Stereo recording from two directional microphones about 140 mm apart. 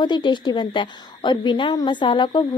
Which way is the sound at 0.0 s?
35° left (ahead or behind).